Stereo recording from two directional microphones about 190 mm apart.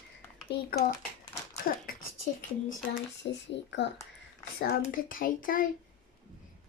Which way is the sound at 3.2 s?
70° left (ahead or behind).